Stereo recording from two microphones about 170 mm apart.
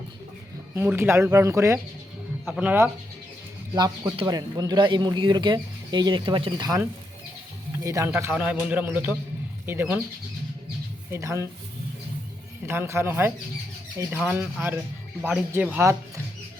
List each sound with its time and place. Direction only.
0.8 s speech: 15° right (ahead or behind)
2.4 s speech: 5° right (ahead or behind)
3.8 s speech: 25° right (ahead or behind)
7.9 s speech: 15° right (ahead or behind)
11.1 s speech: 15° right (ahead or behind)
12.6 s speech: 15° right (ahead or behind)
14.2 s speech: 10° right (ahead or behind)